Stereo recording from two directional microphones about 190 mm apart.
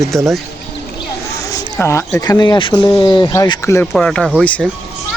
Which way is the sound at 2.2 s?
20° left (ahead or behind).